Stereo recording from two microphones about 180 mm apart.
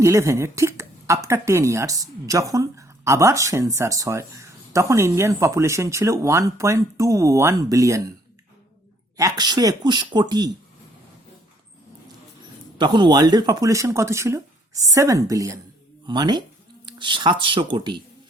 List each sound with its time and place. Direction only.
0.0 s speech: 15° right (ahead or behind)
9.1 s speech: 20° right (ahead or behind)
12.8 s speech: 25° right (ahead or behind)